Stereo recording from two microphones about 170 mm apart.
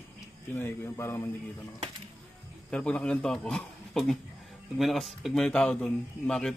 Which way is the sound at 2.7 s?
5° left (ahead or behind).